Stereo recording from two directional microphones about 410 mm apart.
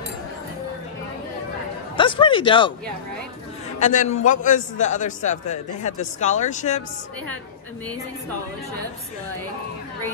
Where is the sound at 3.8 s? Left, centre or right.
Centre.